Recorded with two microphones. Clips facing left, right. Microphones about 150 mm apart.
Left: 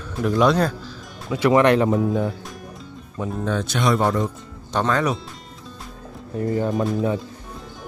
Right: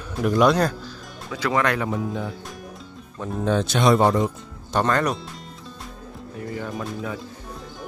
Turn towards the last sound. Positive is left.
turn(degrees=30)  # may be behind; listen again after turning